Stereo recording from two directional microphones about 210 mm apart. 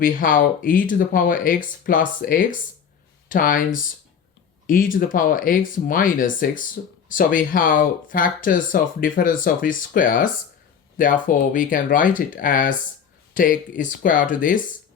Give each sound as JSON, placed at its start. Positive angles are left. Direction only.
{"t": 0.0, "sound": "speech", "side_deg": 40}